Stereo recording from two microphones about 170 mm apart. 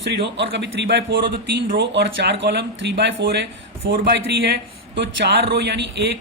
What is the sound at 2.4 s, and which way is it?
Speech, 90° right.